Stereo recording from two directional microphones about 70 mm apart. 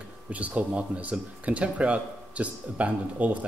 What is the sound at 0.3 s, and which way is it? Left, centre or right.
Speech, right.